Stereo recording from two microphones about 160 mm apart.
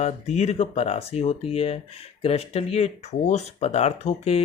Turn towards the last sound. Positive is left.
turn(degrees=40)  # may be behind; listen again after turning